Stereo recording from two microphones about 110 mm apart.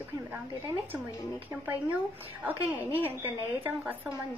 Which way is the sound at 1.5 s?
10° right (ahead or behind).